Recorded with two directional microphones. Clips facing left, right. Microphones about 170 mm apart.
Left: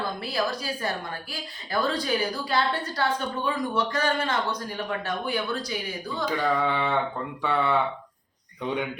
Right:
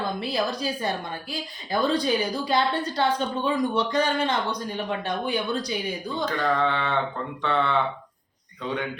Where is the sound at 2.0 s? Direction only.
20° right (ahead or behind).